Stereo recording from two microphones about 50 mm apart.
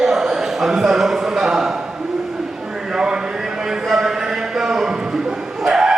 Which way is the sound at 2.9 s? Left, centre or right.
Centre.